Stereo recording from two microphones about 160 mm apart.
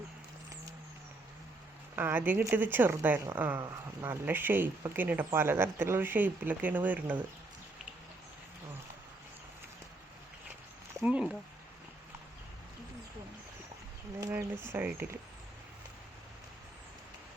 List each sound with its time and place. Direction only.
2.0 s speech: 10° right (ahead or behind)
11.0 s speech: 5° right (ahead or behind)
14.2 s speech: 20° right (ahead or behind)